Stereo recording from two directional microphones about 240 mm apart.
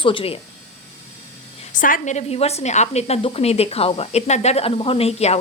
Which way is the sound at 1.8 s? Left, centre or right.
Left.